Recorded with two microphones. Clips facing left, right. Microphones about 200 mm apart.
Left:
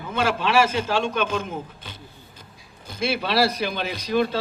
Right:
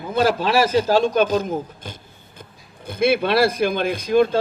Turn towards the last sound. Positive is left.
turn(degrees=-50)  # may be behind; listen again after turning